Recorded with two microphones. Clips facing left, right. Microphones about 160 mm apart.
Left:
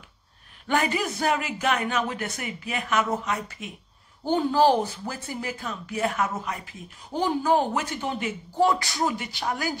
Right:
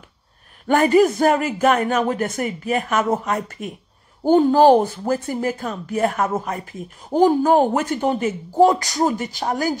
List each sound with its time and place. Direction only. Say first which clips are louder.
0.7 s speech: right 11 dB; 45° right (ahead or behind)